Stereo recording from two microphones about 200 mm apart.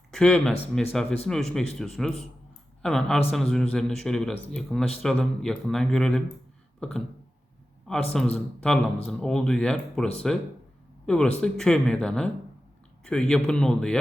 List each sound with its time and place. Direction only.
0.1 s a man's voice: 5° left (ahead or behind)
6.7 s a sound: 5° left (ahead or behind)
7.9 s a man's voice: 5° left (ahead or behind)